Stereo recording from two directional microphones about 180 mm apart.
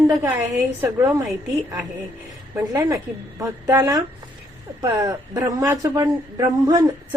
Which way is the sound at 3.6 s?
20° right (ahead or behind).